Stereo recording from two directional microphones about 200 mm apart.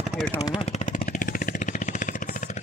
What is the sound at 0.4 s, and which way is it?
Vehicle, 30° left (ahead or behind).